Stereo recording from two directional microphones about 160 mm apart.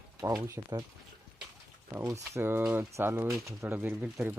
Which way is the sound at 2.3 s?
15° right (ahead or behind).